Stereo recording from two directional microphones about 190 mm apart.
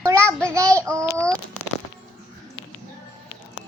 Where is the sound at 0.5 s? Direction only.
15° right (ahead or behind).